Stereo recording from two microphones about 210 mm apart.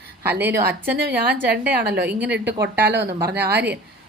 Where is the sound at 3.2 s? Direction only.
50° right (ahead or behind).